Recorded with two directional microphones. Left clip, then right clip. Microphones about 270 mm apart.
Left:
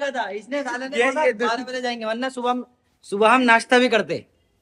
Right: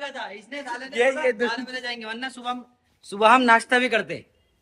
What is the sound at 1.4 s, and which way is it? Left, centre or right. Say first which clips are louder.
A man's voice: left 4 dB; left.